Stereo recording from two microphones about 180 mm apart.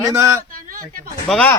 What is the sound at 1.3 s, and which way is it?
Speech, 5° left (ahead or behind).